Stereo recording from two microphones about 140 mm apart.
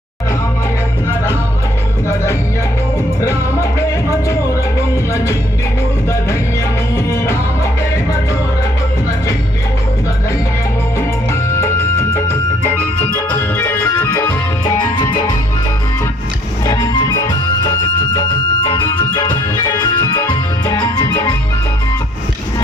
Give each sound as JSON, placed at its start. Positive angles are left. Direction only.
{"t": 3.2, "sound": "music", "side_deg": 20}
{"t": 5.1, "sound": "music", "side_deg": 20}
{"t": 6.9, "sound": "music", "side_deg": 20}
{"t": 11.3, "sound": "music", "side_deg": 20}
{"t": 16.6, "sound": "music", "side_deg": 25}
{"t": 18.7, "sound": "music", "side_deg": 30}